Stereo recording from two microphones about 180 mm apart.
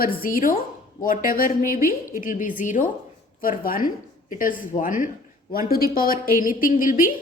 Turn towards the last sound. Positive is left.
turn(degrees=50)  # may be behind; listen again after turning